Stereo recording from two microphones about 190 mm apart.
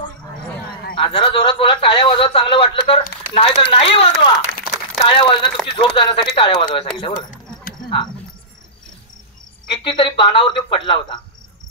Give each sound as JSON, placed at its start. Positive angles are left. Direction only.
{"t": 0.9, "sound": "a man's voice", "side_deg": 25}
{"t": 9.7, "sound": "a man's voice", "side_deg": 25}